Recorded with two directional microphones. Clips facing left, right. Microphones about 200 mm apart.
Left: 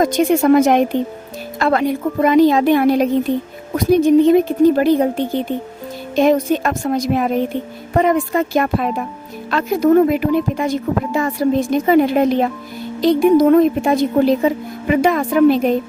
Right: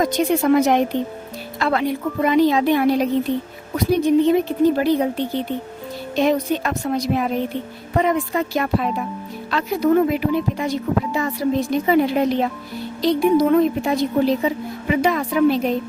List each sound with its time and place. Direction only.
0.0 s a woman's voice: 50° left (ahead or behind)